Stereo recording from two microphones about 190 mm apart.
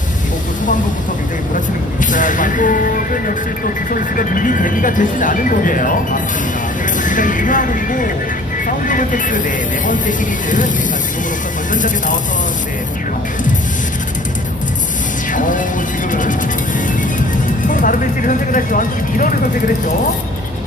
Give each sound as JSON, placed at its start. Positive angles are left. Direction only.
{"t": 1.5, "sound": "speech", "side_deg": 45}
{"t": 11.7, "sound": "speech", "side_deg": 45}
{"t": 15.3, "sound": "music", "side_deg": 45}
{"t": 17.7, "sound": "speech", "side_deg": 45}